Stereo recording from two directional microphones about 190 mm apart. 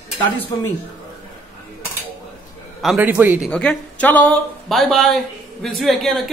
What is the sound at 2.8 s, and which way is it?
Speech, 5° right (ahead or behind).